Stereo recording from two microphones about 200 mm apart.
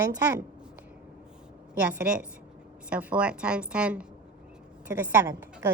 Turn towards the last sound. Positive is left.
turn(degrees=-15)  # may be behind; listen again after turning